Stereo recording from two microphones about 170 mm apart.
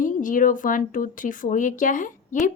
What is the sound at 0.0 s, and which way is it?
Speech, 50° left (ahead or behind).